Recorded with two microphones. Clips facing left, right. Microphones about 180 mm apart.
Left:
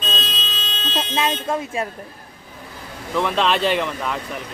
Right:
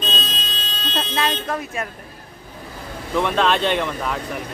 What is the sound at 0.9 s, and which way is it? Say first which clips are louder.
Speech: left 1 dB; 20° left (ahead or behind).